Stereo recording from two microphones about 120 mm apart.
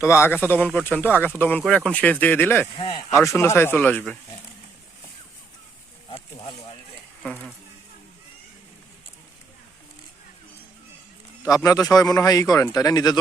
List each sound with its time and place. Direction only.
0.0 s speech: 20° left (ahead or behind)
2.7 s speech: 50° left (ahead or behind)
3.1 s a man's voice: 25° left (ahead or behind)
11.4 s a man's voice: 30° left (ahead or behind)